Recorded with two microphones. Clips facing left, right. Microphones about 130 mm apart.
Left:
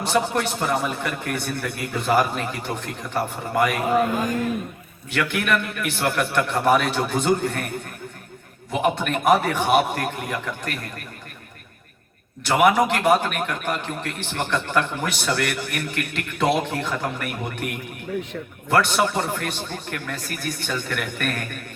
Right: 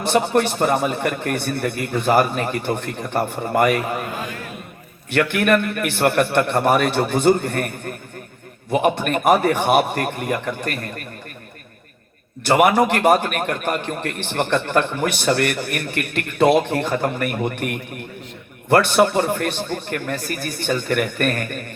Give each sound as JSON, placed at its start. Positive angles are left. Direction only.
{"t": 0.0, "sound": "a man's voice", "side_deg": -60}
{"t": 5.1, "sound": "a man's voice", "side_deg": -55}
{"t": 12.5, "sound": "a man's voice", "side_deg": -60}